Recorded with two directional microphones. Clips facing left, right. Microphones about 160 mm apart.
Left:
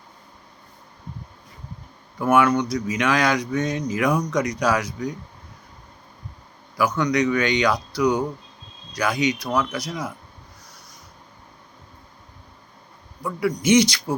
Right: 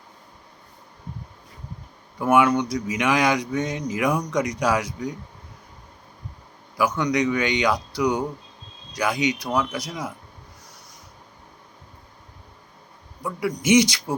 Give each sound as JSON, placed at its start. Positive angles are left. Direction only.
{"t": 2.2, "sound": "speech", "side_deg": -15}
{"t": 6.7, "sound": "speech", "side_deg": -15}
{"t": 13.2, "sound": "speech", "side_deg": -15}